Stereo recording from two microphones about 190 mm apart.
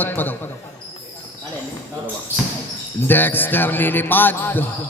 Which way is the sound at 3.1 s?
10° left (ahead or behind).